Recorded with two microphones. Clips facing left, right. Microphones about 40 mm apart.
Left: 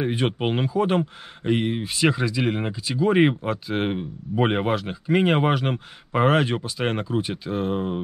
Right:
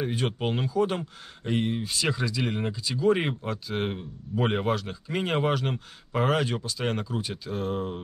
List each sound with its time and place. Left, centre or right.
0.0 s speech: left